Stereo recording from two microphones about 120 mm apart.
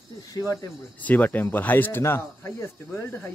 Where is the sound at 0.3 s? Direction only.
30° left (ahead or behind).